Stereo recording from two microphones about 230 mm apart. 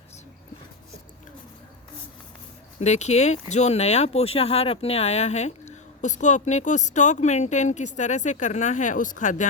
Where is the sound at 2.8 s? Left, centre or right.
Left.